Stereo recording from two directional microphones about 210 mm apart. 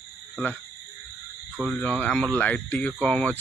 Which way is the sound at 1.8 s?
5° left (ahead or behind).